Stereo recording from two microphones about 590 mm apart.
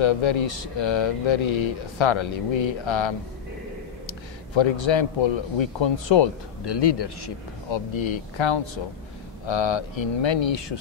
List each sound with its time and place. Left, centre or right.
0.0 s speech: left
4.6 s speech: left